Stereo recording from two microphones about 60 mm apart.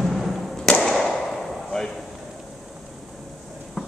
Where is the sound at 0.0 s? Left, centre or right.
Centre.